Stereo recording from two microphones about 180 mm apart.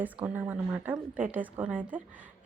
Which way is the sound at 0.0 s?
10° right (ahead or behind).